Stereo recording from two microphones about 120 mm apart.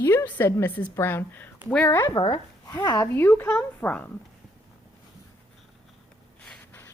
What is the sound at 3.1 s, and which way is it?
Speech, 20° left (ahead or behind).